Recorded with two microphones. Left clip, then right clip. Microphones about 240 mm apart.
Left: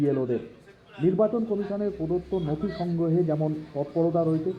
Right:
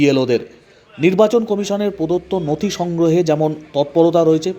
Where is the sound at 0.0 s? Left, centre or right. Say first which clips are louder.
Right 11 dB; right.